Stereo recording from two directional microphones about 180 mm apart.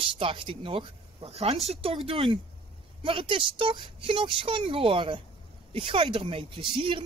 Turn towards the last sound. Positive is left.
turn(degrees=-30)  # may be behind; listen again after turning